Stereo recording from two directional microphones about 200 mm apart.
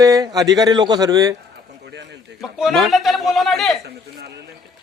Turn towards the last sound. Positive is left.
turn(degrees=-55)  # may be behind; listen again after turning